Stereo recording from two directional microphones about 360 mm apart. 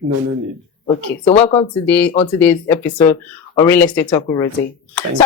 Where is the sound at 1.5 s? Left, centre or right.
Centre.